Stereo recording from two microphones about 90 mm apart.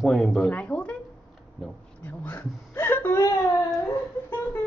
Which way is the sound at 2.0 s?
20° left (ahead or behind).